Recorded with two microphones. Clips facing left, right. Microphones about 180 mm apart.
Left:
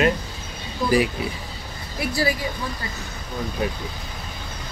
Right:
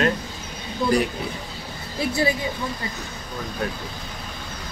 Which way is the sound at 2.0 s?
25° right (ahead or behind).